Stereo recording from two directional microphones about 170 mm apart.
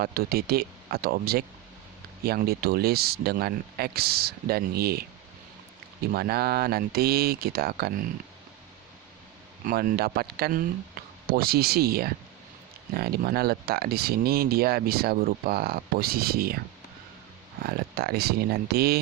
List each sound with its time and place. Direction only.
0.0 s speech: 65° right (ahead or behind)
6.1 s speech: 65° right (ahead or behind)
9.6 s speech: 60° right (ahead or behind)
17.6 s speech: 65° right (ahead or behind)